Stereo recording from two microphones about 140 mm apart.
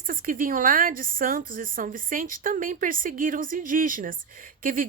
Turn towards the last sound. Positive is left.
turn(degrees=-75)  # may be behind; listen again after turning